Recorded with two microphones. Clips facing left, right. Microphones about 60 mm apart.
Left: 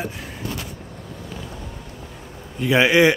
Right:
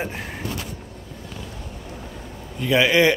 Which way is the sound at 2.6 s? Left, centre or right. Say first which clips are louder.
Left 2 dB; centre.